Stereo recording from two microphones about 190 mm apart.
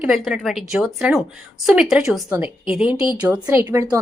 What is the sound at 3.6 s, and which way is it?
Speech, 20° right (ahead or behind).